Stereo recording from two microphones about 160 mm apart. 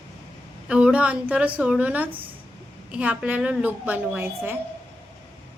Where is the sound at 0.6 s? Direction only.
5° right (ahead or behind).